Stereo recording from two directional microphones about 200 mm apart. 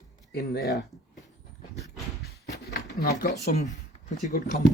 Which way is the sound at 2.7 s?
55° left (ahead or behind).